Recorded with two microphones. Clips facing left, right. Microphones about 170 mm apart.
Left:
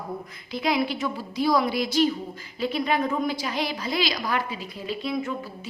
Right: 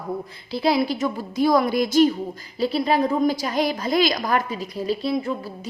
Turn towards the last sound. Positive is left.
turn(degrees=-35)  # may be behind; listen again after turning